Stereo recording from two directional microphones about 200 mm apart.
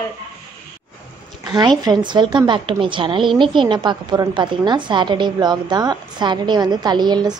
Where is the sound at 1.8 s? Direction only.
20° right (ahead or behind).